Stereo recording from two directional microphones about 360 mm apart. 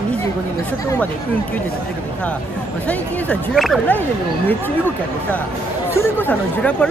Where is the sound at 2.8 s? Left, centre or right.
Centre.